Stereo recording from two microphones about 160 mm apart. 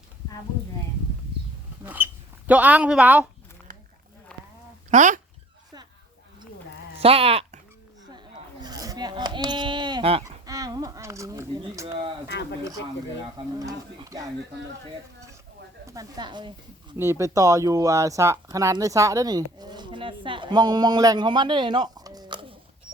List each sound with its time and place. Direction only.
1.8 s a sound: 10° right (ahead or behind)
2.5 s speech: 10° right (ahead or behind)
4.9 s speech: 50° right (ahead or behind)
7.0 s speech: 35° right (ahead or behind)
8.6 s sheep: 25° right (ahead or behind)
10.4 s a sound: 20° right (ahead or behind)
12.3 s speech: 90° left
13.7 s speech: 20° right (ahead or behind)
15.9 s speech: 25° right (ahead or behind)
17.0 s a woman's voice: 15° right (ahead or behind)